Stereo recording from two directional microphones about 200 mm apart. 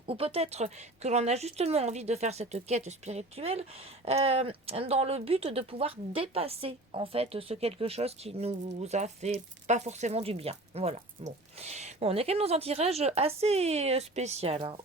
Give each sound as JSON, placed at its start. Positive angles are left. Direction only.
{"t": 0.0, "sound": "speech", "side_deg": -30}